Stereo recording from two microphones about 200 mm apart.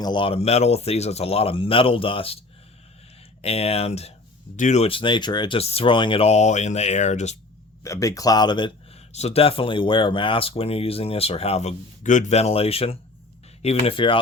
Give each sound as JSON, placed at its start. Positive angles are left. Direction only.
{"t": 0.0, "sound": "speech", "side_deg": 25}
{"t": 3.4, "sound": "speech", "side_deg": 30}
{"t": 7.9, "sound": "speech", "side_deg": 15}